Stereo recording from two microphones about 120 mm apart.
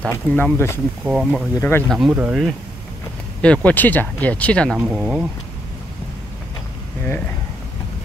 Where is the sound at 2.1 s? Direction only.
10° right (ahead or behind).